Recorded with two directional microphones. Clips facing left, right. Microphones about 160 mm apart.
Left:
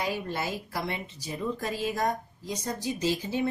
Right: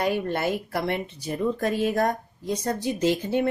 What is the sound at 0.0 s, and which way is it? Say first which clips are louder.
A woman's voice: right 6 dB; 55° right (ahead or behind).